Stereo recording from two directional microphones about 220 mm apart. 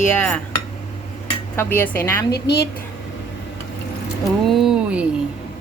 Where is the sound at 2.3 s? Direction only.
45° left (ahead or behind).